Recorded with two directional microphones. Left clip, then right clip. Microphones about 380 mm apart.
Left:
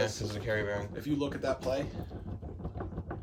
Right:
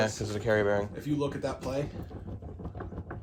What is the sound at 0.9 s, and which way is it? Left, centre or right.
Speech, centre.